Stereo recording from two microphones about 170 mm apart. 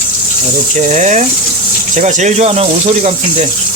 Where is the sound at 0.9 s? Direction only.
45° right (ahead or behind).